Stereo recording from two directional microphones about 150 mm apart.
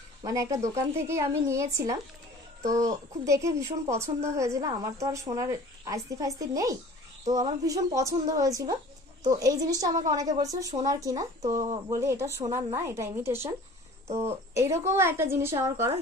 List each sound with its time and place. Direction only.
0.2 s a woman's voice: 20° right (ahead or behind)
3.3 s a woman's voice: 20° right (ahead or behind)
14.0 s speech: 45° right (ahead or behind)
14.5 s a woman's voice: 15° right (ahead or behind)